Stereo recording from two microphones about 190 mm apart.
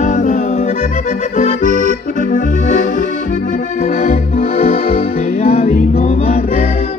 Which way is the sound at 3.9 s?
35° left (ahead or behind).